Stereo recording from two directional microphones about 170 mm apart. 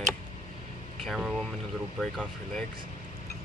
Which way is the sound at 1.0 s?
Centre (ahead or behind).